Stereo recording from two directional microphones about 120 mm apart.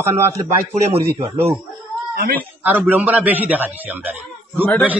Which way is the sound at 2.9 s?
15° right (ahead or behind).